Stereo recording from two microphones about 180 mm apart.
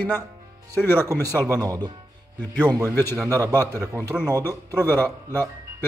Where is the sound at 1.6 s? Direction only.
20° right (ahead or behind).